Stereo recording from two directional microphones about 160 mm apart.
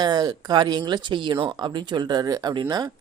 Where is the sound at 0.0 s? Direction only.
25° right (ahead or behind).